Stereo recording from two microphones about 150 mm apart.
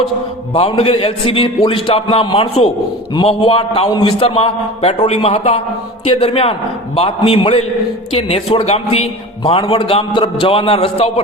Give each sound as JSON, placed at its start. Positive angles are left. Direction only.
{"t": 0.5, "sound": "a man's voice", "side_deg": 35}